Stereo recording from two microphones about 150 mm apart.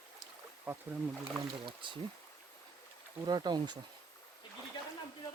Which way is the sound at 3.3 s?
30° right (ahead or behind).